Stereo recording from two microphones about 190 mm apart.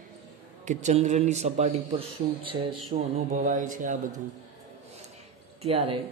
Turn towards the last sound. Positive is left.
turn(degrees=-30)  # may be behind; listen again after turning